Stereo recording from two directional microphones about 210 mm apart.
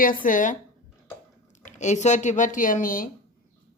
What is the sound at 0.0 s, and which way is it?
Speech, 40° left (ahead or behind).